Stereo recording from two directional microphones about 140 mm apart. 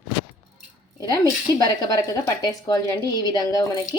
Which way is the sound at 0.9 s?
25° left (ahead or behind).